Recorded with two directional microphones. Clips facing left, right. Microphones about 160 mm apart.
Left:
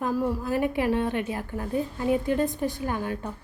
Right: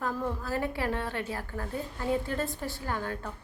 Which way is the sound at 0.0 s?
10° left (ahead or behind).